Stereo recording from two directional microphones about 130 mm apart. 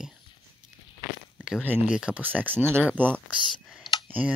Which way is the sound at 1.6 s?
10° right (ahead or behind).